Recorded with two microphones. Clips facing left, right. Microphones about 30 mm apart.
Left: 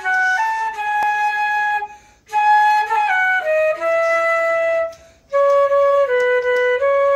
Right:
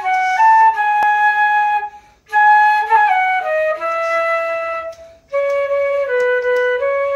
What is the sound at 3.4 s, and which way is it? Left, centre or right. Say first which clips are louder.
Music: even; right.